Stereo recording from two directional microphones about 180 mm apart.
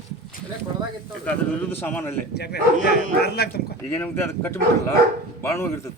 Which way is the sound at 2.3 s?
65° left (ahead or behind).